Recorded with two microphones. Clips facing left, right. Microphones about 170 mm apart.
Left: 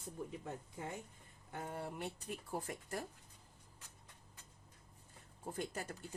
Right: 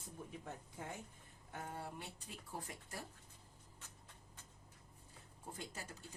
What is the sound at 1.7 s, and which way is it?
Speech, 60° left (ahead or behind).